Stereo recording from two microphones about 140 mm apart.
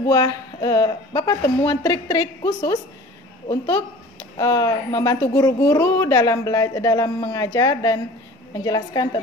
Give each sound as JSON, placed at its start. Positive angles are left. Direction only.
{"t": 0.0, "sound": "a woman's voice", "side_deg": 25}